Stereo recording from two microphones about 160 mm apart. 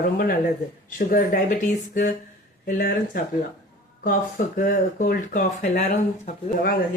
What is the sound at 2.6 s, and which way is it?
Speech, 70° left (ahead or behind).